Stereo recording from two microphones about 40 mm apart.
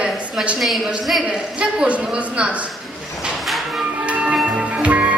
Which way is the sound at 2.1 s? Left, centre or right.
Right.